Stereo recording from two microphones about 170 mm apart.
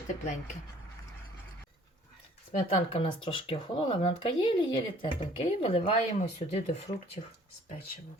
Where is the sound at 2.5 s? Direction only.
35° left (ahead or behind).